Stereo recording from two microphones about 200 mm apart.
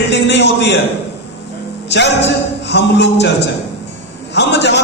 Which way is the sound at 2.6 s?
60° left (ahead or behind).